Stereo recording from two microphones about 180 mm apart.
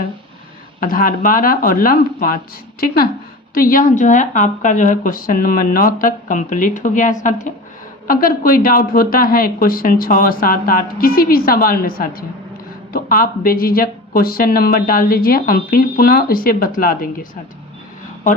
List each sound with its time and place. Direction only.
0.8 s a woman's voice: 50° left (ahead or behind)